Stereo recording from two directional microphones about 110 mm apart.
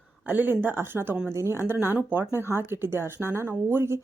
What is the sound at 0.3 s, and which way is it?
Speech, 15° right (ahead or behind).